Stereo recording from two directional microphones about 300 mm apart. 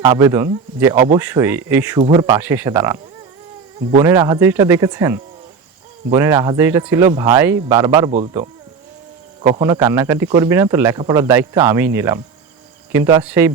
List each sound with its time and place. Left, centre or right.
0.0 s speech: centre
4.0 s speech: centre
9.6 s speech: centre